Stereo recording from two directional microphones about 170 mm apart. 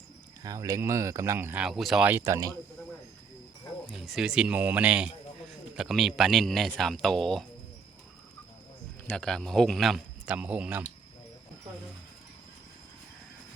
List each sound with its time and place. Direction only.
0.4 s speech: 20° right (ahead or behind)
3.8 s a man's voice: centre (ahead or behind)
9.0 s a man's voice: 5° left (ahead or behind)